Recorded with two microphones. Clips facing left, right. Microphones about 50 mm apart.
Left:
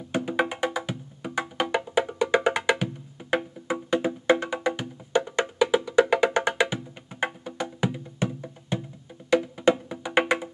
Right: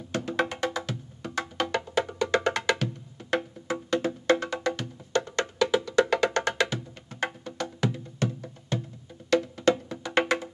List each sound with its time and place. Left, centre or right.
0.1 s music: centre